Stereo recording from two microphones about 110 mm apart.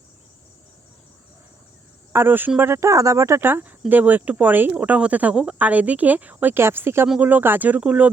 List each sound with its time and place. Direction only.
2.1 s speech: 20° right (ahead or behind)